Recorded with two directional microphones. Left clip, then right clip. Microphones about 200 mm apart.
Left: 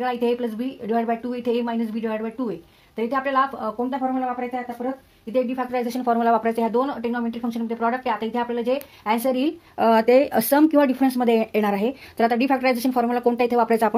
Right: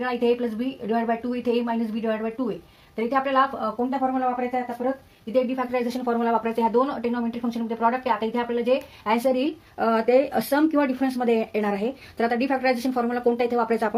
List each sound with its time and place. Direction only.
0.0 s speech: 40° left (ahead or behind)
5.3 s speech: 40° left (ahead or behind)